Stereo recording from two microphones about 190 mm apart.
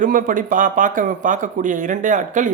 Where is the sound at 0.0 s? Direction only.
45° right (ahead or behind).